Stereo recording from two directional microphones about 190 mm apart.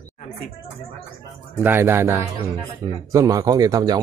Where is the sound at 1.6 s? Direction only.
10° right (ahead or behind).